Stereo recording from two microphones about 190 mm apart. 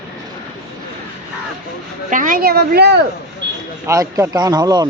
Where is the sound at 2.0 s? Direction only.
45° right (ahead or behind).